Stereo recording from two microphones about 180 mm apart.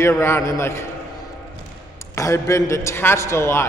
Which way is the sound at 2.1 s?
15° left (ahead or behind).